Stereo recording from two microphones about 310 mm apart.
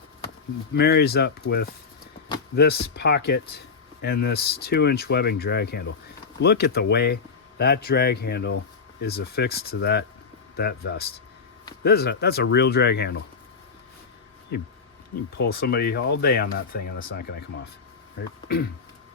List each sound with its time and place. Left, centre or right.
0.8 s speech: left
14.5 s speech: left